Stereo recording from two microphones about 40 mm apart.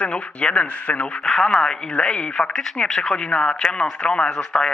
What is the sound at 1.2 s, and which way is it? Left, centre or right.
Speech, left.